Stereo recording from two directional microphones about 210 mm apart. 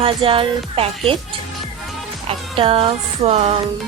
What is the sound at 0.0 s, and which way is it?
Speech, 25° right (ahead or behind).